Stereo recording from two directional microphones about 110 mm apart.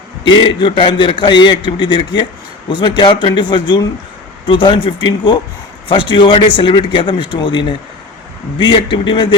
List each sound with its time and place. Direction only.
0.3 s a man's voice: 50° left (ahead or behind)